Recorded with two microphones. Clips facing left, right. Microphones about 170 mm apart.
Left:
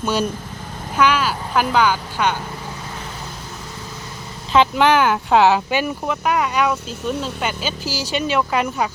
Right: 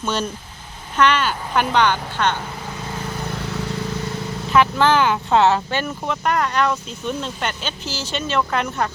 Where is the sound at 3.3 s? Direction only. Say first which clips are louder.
Right 7 dB; 70° right (ahead or behind).